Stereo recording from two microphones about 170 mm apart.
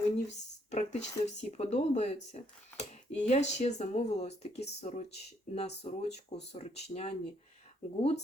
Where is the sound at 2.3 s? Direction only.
40° left (ahead or behind).